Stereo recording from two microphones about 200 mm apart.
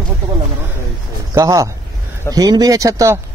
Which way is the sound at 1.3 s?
15° right (ahead or behind).